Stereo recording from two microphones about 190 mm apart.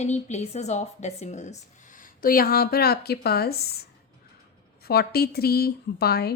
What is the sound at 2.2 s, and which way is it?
A woman's voice, 50° left (ahead or behind).